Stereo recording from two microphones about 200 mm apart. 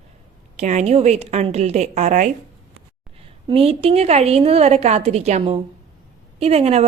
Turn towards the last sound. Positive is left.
turn(degrees=-30)  # may be behind; listen again after turning